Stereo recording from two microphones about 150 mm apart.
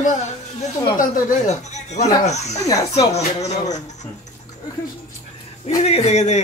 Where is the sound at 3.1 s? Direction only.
50° left (ahead or behind).